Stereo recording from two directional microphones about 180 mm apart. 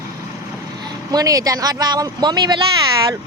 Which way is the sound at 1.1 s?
20° right (ahead or behind).